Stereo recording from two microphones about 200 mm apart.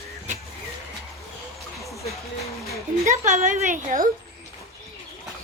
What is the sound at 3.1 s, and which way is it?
Speech, 40° right (ahead or behind).